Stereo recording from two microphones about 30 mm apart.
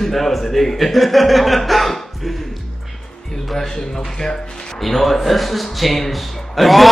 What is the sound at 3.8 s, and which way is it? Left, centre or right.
Speech, centre.